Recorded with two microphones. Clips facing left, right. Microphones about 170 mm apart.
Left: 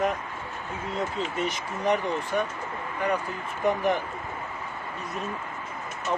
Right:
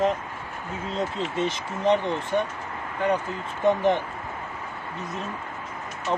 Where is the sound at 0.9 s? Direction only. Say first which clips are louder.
Right 2 dB; 25° right (ahead or behind).